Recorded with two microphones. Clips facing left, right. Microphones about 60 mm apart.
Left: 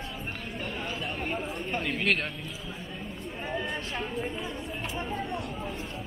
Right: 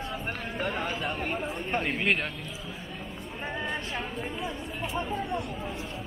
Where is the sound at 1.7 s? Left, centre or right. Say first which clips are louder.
Right 2 dB; right.